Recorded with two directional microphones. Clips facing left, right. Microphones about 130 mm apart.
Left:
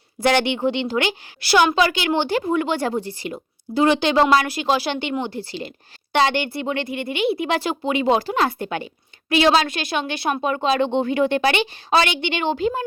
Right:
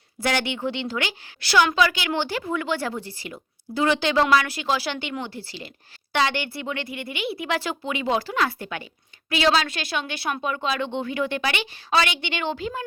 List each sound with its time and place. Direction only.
0.2 s a woman's voice: 20° left (ahead or behind)